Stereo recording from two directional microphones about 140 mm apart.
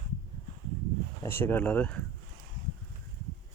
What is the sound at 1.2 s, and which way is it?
Speech, 15° left (ahead or behind).